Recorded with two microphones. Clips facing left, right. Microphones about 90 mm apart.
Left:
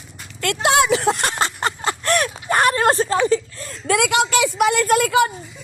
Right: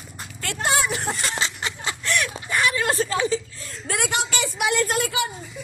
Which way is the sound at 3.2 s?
60° left (ahead or behind).